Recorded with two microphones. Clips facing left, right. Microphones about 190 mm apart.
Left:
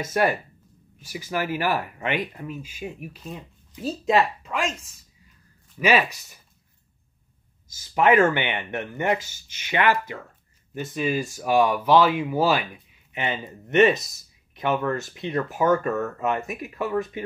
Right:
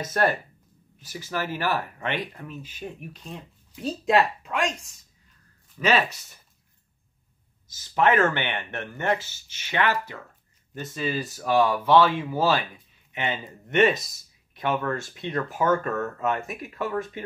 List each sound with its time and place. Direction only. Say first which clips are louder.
0.0 s speech: left 1 dB; 10° left (ahead or behind)
5.8 s speech: left 2 dB; 10° left (ahead or behind)
7.6 s speech: left 2 dB; 15° left (ahead or behind)
13.1 s speech: left 1 dB; 30° left (ahead or behind)